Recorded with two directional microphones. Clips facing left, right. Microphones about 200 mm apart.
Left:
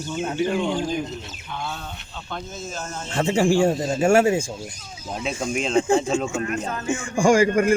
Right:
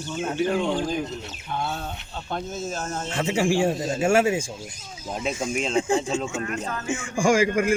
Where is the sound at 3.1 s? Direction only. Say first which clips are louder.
Left 4 dB; 45° left (ahead or behind).